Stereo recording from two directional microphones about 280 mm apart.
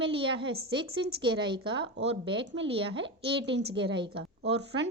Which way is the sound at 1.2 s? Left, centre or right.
Centre.